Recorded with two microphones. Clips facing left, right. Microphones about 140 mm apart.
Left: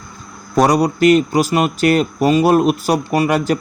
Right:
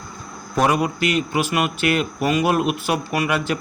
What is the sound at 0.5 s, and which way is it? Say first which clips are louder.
A man's voice: left 5 dB; 40° left (ahead or behind).